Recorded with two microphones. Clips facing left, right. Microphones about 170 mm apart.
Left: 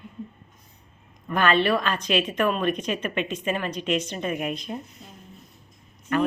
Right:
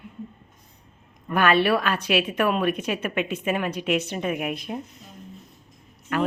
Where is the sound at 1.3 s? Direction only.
10° right (ahead or behind).